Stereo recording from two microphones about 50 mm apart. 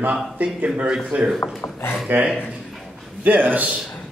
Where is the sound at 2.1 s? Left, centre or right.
Right.